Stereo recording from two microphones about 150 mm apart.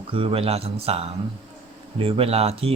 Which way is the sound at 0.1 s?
35° right (ahead or behind).